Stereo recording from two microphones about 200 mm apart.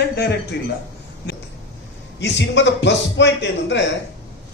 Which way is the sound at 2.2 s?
60° left (ahead or behind).